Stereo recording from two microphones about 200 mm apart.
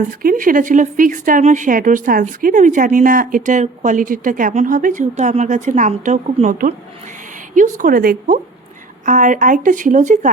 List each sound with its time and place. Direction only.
0.2 s a woman's voice: 45° right (ahead or behind)